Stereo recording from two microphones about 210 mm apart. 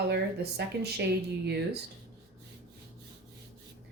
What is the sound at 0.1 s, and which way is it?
Speech, 50° right (ahead or behind).